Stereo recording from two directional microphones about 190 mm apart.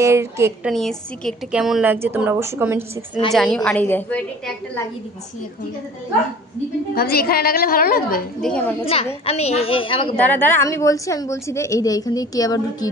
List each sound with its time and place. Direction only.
0.0 s a woman's voice: 15° right (ahead or behind)
0.7 s a woman's voice: centre (ahead or behind); by 2.8 s 15° right (ahead or behind)
3.3 s a woman's voice: 5° left (ahead or behind)
7.0 s a woman's voice: 55° left (ahead or behind)
8.4 s a woman's voice: 5° left (ahead or behind)
8.8 s a woman's voice: 30° left (ahead or behind)
10.2 s a woman's voice: 10° left (ahead or behind)